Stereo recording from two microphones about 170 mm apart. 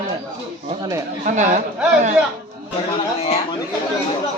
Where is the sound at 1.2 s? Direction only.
45° right (ahead or behind).